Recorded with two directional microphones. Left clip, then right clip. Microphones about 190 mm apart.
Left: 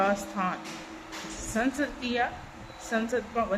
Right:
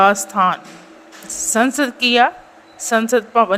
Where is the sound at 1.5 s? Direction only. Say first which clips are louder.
Right 13 dB; 40° right (ahead or behind).